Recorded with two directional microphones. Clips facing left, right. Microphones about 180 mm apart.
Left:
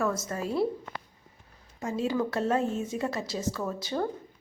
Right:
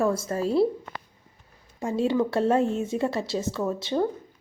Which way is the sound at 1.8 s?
30° right (ahead or behind).